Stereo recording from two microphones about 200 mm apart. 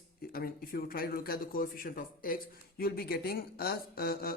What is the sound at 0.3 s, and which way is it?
A man's voice, 50° left (ahead or behind).